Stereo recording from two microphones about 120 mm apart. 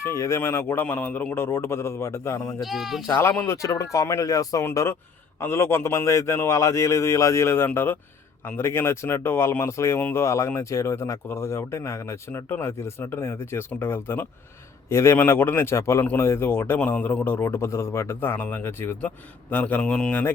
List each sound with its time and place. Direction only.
0.0 s speech: 25° left (ahead or behind)
2.6 s speech: centre (ahead or behind)
3.2 s speech: 20° left (ahead or behind)